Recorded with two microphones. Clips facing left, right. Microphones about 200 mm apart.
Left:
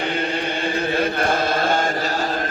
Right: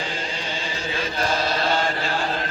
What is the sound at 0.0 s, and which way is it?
Chant, 60° left (ahead or behind).